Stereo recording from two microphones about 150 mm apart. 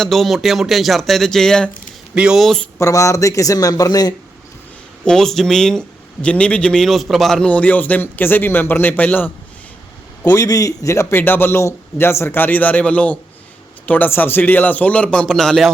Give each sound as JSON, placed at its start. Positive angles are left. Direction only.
{"t": 0.0, "sound": "speech", "side_deg": 0}
{"t": 2.7, "sound": "speech", "side_deg": 20}
{"t": 5.0, "sound": "a man's voice", "side_deg": 5}